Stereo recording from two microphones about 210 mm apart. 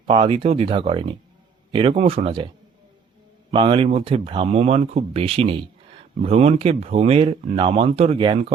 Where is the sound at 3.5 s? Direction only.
25° right (ahead or behind).